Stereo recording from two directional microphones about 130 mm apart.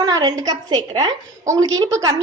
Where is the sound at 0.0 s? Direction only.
30° right (ahead or behind).